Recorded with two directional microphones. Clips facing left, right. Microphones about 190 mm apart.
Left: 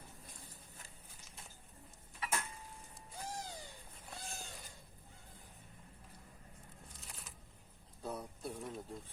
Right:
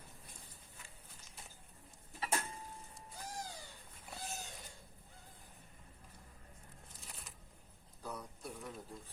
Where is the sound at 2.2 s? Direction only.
35° right (ahead or behind).